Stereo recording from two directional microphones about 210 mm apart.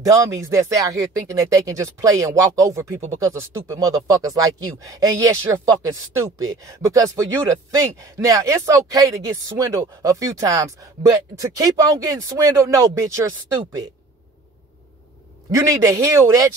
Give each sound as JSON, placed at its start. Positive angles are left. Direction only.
{"t": 0.0, "sound": "speech", "side_deg": -15}
{"t": 6.3, "sound": "speech", "side_deg": -15}
{"t": 15.5, "sound": "speech", "side_deg": -15}